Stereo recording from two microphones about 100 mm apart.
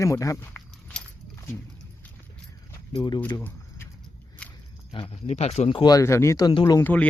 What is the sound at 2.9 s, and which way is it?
Speech, 45° left (ahead or behind).